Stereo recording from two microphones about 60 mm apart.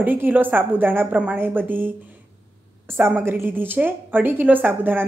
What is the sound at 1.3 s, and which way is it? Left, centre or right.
A woman's voice, right.